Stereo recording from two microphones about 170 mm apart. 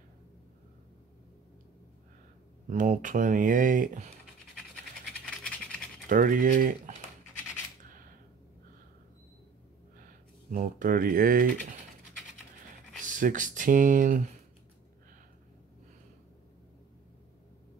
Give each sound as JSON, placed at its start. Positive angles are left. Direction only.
{"t": 2.7, "sound": "speech", "side_deg": -50}
{"t": 5.1, "sound": "scratch", "side_deg": 5}
{"t": 6.0, "sound": "speech", "side_deg": -50}
{"t": 10.5, "sound": "speech", "side_deg": -50}
{"t": 13.0, "sound": "speech", "side_deg": -50}